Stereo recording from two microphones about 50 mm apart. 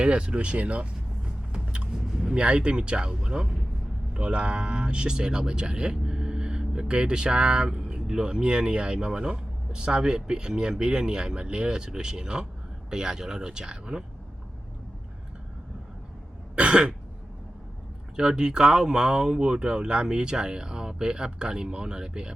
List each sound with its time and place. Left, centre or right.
0.0 s speech: centre
1.5 s vehicle: centre
2.2 s speech: right
16.6 s throat clearing: right
18.2 s speech: centre